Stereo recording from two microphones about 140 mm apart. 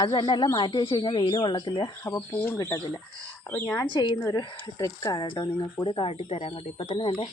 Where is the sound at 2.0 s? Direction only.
15° left (ahead or behind).